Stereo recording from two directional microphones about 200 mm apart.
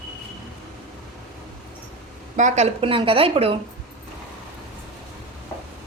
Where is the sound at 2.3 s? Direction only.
35° right (ahead or behind).